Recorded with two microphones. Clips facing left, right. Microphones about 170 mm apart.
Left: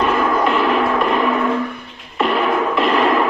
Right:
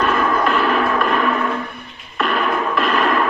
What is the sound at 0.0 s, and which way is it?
Music, 20° left (ahead or behind).